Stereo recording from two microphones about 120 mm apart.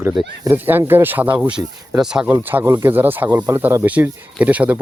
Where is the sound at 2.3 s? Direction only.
15° right (ahead or behind).